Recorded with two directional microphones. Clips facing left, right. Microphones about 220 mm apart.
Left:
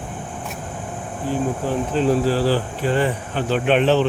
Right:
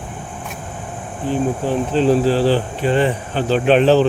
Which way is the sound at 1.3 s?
30° right (ahead or behind).